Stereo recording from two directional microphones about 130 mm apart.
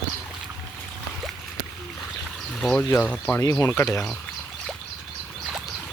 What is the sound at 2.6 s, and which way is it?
Speech, 5° left (ahead or behind).